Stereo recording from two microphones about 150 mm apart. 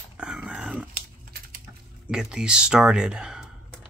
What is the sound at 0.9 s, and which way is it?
Typing, 90° right.